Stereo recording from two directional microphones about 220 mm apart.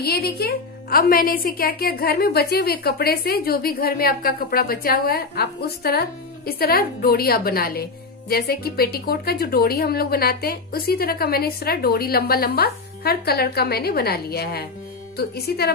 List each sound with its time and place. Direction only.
0.0 s a woman's voice: 45° left (ahead or behind)